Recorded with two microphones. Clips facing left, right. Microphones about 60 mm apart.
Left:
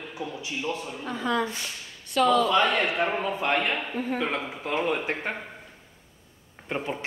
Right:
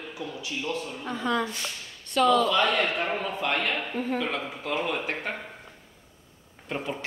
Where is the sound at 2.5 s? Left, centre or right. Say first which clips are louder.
Left 1 dB; left.